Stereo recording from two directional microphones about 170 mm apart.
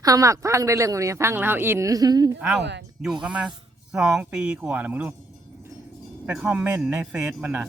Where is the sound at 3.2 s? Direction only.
5° right (ahead or behind).